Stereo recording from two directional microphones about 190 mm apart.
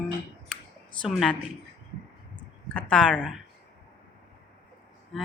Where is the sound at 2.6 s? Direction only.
5° left (ahead or behind).